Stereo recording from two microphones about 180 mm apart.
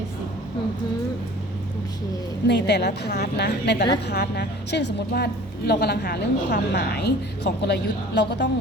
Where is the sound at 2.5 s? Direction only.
70° left (ahead or behind).